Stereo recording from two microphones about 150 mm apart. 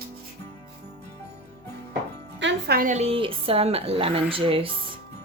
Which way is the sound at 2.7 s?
70° right (ahead or behind).